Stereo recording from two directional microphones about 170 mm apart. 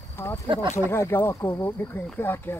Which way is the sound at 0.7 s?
15° left (ahead or behind).